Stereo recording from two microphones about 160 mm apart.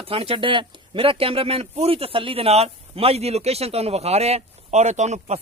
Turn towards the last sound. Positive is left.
turn(degrees=-45)  # may be behind; listen again after turning